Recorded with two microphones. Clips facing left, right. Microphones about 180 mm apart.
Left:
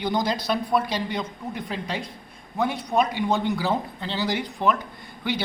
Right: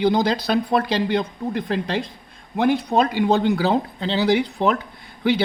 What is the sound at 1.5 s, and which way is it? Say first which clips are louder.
Speech: right 7 dB; 90° right.